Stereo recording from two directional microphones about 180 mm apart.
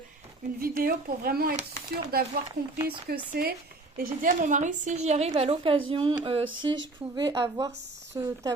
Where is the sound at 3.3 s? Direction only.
60° right (ahead or behind).